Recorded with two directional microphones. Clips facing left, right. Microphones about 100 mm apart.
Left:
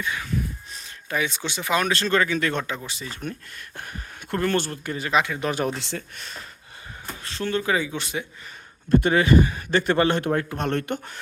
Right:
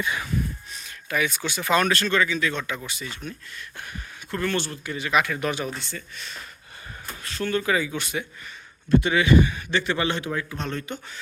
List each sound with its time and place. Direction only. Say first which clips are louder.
0.0 s a sound: right 1 dB; 15° right (ahead or behind)
0.7 s a sound: even; 35° left (ahead or behind)
1.9 s speech: even; 30° left (ahead or behind)
2.1 s a man's voice: left 2 dB; 50° left (ahead or behind)
2.6 s speech: even; 30° left (ahead or behind)
3.2 s a man's voice: left 3 dB; 50° left (ahead or behind)
5.1 s speech: even; 25° left (ahead or behind)
5.6 s speech: left 5 dB; 90° left
6.1 s a man's voice: left 1 dB; 45° left (ahead or behind)
7.2 s speech: even; 30° left (ahead or behind)
8.9 s a man's voice: left 1 dB; 45° left (ahead or behind)